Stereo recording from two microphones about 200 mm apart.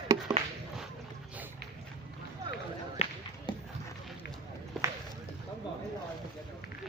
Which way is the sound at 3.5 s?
20° left (ahead or behind).